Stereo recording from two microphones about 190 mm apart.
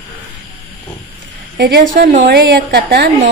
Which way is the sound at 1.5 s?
60° right (ahead or behind).